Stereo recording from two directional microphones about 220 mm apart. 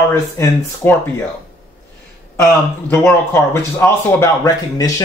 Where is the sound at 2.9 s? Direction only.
10° left (ahead or behind).